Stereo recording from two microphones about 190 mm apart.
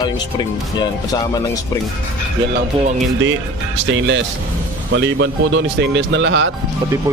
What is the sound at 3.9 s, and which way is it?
Speech, 75° right (ahead or behind).